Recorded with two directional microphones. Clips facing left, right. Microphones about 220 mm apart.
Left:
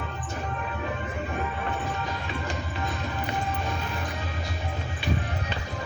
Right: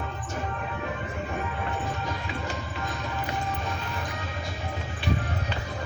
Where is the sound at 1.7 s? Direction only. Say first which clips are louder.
Even; centre (ahead or behind).